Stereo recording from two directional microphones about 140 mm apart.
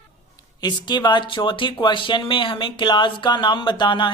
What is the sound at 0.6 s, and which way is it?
Speech, 30° left (ahead or behind).